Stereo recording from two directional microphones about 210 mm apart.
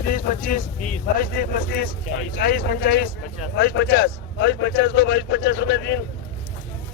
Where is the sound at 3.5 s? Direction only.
55° left (ahead or behind).